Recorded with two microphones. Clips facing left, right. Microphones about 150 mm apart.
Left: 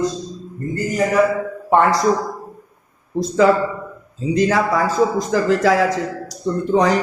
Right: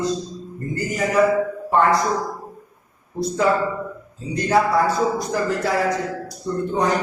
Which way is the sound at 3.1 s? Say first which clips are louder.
Left 5 dB; 90° left.